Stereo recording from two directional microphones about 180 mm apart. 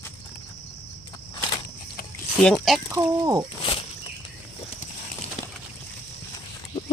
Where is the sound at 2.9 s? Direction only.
20° right (ahead or behind).